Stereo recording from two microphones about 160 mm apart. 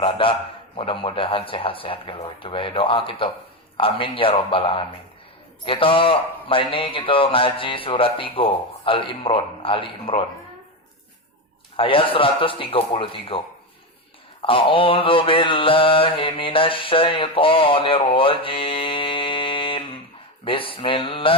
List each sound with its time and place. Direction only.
0.0 s mantra: 35° left (ahead or behind)
11.8 s mantra: 35° left (ahead or behind)
14.4 s mantra: 35° left (ahead or behind)